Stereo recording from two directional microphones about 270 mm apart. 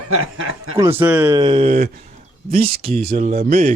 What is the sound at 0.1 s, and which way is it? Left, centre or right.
Speech, right.